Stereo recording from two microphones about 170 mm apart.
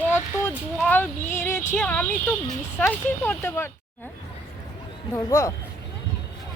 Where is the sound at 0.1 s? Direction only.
10° left (ahead or behind).